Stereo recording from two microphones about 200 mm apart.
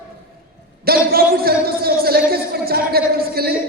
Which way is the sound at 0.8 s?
50° right (ahead or behind).